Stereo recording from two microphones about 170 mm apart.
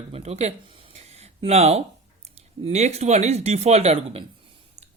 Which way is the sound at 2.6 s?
40° right (ahead or behind).